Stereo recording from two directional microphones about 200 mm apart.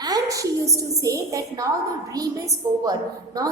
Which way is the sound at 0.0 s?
20° right (ahead or behind).